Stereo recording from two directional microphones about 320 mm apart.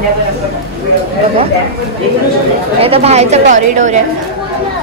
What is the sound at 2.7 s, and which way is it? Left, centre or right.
Speech, centre.